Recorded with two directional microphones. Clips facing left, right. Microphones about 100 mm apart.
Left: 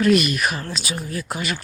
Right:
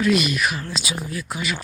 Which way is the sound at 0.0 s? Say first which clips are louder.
Left 2 dB; 50° left (ahead or behind).